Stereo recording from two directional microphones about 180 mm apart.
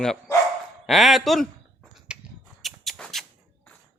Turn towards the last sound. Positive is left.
turn(degrees=0)  # may be behind; listen again after turning